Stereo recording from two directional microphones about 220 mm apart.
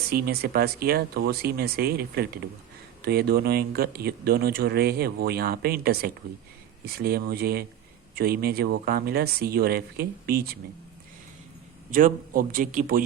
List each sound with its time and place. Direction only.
0.1 s speech: 45° right (ahead or behind)
11.9 s a man's voice: 40° right (ahead or behind)